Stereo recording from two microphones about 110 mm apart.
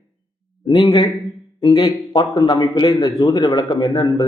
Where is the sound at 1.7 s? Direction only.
35° left (ahead or behind).